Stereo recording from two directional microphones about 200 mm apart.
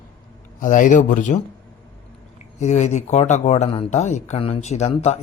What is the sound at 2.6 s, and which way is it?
A man's voice, 35° left (ahead or behind).